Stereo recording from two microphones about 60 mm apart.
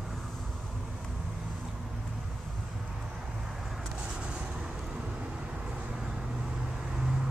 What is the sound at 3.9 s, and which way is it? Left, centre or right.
Vehicle, centre.